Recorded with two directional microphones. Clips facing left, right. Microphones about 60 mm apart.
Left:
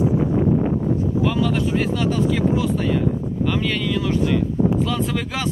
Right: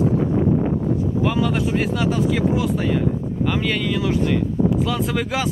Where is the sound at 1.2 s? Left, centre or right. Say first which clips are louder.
Right 1 dB; centre.